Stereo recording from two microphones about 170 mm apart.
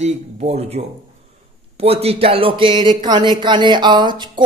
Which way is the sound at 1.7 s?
35° right (ahead or behind).